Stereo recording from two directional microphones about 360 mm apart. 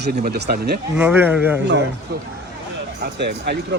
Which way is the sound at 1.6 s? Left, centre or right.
Right.